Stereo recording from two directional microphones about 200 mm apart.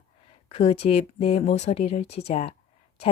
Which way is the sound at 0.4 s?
30° left (ahead or behind).